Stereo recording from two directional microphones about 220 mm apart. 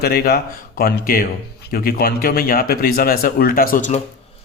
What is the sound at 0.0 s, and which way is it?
A man's voice, 45° left (ahead or behind).